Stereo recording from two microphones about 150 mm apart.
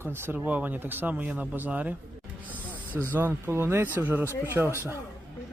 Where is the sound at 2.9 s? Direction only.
15° left (ahead or behind).